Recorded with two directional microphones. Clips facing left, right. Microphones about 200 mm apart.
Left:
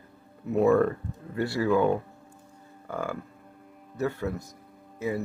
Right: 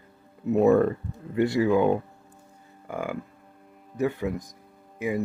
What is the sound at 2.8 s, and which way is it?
Cattle, 15° right (ahead or behind).